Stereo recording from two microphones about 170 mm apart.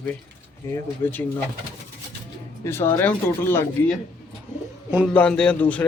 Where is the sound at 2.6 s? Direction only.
15° left (ahead or behind).